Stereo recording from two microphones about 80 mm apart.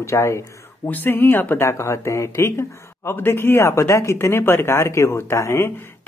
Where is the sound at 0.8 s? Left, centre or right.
Left.